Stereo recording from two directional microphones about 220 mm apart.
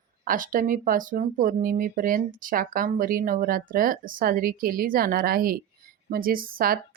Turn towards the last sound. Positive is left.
turn(degrees=-40)  # may be behind; listen again after turning